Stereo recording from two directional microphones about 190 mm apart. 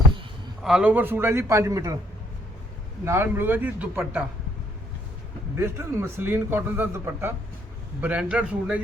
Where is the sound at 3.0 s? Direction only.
15° right (ahead or behind).